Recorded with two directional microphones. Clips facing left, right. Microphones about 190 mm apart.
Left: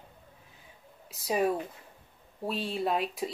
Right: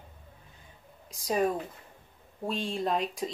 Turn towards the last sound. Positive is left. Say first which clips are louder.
# even
turn(degrees=5)  # may be behind; listen again after turning